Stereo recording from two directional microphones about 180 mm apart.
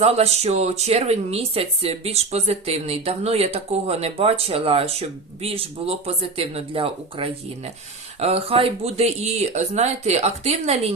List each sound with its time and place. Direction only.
0.0 s speech: 35° right (ahead or behind)